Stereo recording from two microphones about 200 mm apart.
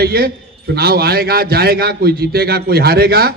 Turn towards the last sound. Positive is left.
turn(degrees=-50)  # may be behind; listen again after turning